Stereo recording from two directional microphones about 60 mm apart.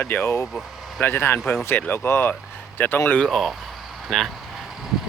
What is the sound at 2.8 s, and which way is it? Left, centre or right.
Speech, left.